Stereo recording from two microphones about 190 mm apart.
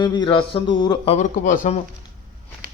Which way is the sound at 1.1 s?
40° left (ahead or behind).